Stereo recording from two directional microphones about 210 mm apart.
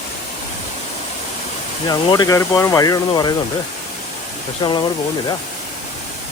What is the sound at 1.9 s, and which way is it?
Speech, 20° left (ahead or behind).